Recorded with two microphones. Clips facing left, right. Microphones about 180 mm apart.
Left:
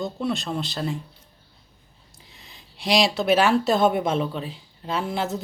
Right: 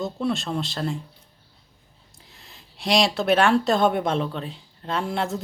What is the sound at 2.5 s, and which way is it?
Speech, centre (ahead or behind).